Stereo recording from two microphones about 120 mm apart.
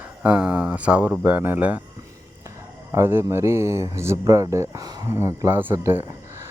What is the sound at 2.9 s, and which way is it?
Speech, 20° right (ahead or behind).